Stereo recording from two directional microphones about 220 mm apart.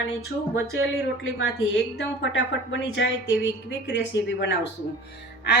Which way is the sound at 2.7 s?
55° left (ahead or behind).